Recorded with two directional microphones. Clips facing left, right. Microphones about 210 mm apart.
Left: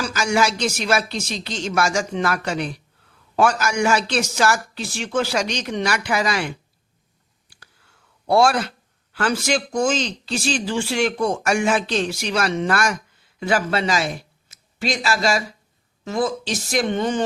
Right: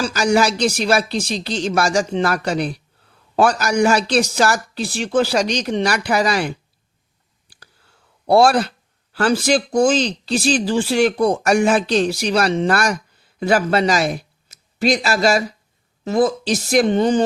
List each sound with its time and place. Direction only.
0.0 s speech: 35° right (ahead or behind)
8.3 s speech: 35° right (ahead or behind)